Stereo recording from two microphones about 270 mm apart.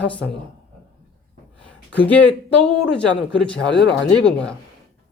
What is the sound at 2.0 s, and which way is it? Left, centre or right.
Speech, centre.